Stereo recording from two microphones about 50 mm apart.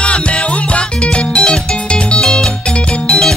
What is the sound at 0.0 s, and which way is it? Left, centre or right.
Music, left.